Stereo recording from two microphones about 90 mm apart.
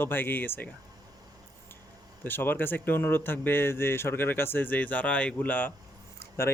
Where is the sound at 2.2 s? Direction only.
25° left (ahead or behind).